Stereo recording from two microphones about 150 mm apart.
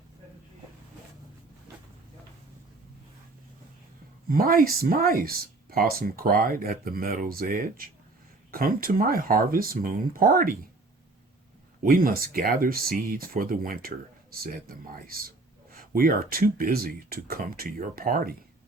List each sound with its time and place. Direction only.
4.3 s speech: 70° right (ahead or behind)
11.8 s speech: 70° right (ahead or behind)